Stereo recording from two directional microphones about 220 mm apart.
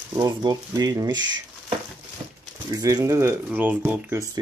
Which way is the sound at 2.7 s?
15° right (ahead or behind).